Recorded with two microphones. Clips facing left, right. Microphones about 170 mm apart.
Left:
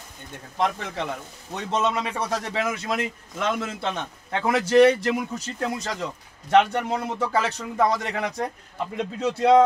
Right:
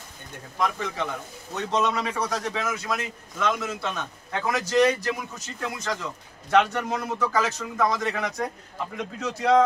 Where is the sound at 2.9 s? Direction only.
25° left (ahead or behind).